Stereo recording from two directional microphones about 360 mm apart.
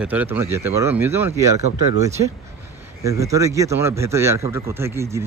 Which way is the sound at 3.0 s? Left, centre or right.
Centre.